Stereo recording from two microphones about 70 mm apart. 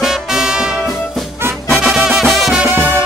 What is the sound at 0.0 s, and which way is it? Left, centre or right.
Music, centre.